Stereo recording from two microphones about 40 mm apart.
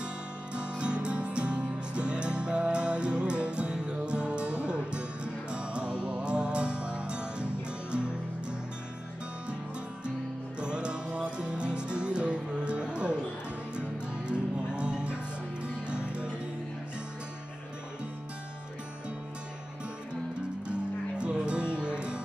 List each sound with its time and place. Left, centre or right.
0.6 s music: right
10.6 s music: right
20.6 s music: right